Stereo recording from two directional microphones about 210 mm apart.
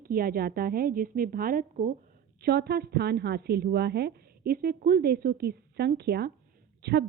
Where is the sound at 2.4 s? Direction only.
50° right (ahead or behind).